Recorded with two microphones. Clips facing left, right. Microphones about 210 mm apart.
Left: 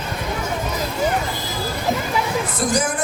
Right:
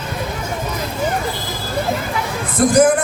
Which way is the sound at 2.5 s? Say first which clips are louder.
Right 11 dB; 55° right (ahead or behind).